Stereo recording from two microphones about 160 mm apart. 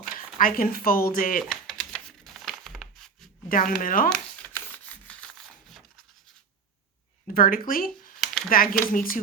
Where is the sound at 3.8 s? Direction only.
60° left (ahead or behind).